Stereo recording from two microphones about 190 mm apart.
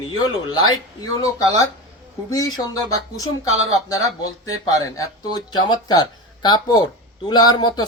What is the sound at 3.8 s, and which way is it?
A man's voice, 20° left (ahead or behind).